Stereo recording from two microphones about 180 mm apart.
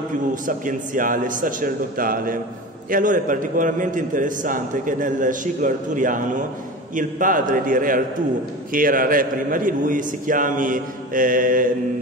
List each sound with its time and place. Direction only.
0.3 s a man's voice: 45° right (ahead or behind)